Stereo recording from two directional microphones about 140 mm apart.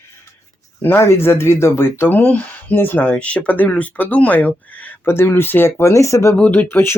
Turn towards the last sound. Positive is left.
turn(degrees=15)  # may be behind; listen again after turning